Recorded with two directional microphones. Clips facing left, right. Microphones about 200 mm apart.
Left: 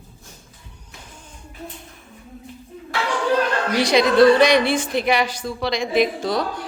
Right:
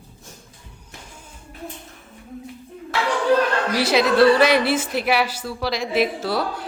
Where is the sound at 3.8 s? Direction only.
5° right (ahead or behind).